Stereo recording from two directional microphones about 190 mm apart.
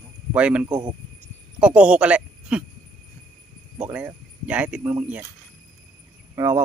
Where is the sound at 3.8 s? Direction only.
5° right (ahead or behind).